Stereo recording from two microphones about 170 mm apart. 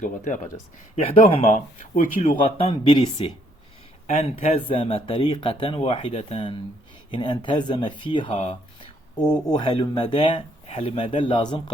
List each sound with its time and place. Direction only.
0.3 s speech: 50° left (ahead or behind)
0.9 s speech: 40° left (ahead or behind)
2.6 s speech: 25° left (ahead or behind)
4.0 s speech: 40° left (ahead or behind)